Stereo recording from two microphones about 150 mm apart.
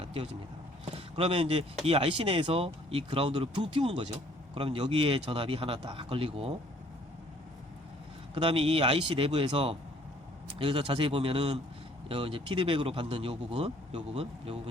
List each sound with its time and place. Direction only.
0.0 s vehicle: 40° right (ahead or behind)
0.9 s speech: 40° right (ahead or behind)
8.4 s speech: 40° right (ahead or behind)